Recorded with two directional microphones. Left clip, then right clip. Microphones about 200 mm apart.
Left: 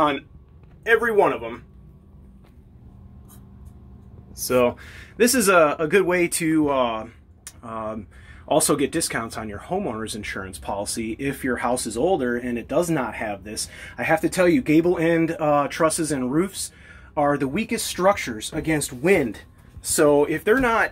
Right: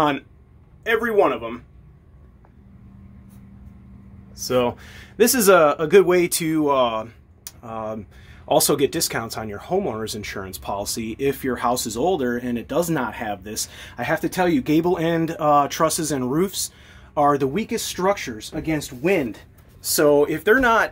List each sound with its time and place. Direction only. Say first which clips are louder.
0.8 s speech: even; 5° right (ahead or behind)
5.2 s speech: right 2 dB; 25° right (ahead or behind)
17.6 s speech: left 2 dB; 10° right (ahead or behind)
18.4 s speech: left 1 dB; centre (ahead or behind); by 20.9 s 20° right (ahead or behind)